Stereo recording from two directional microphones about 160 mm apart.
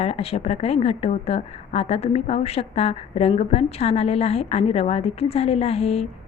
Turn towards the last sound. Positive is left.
turn(degrees=40)  # may be behind; listen again after turning